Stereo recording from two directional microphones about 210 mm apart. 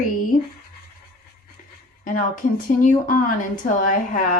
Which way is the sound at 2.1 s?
40° left (ahead or behind).